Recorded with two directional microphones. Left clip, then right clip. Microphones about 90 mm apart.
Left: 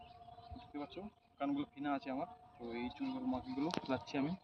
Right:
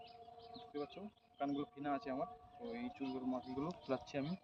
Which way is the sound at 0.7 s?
20° right (ahead or behind).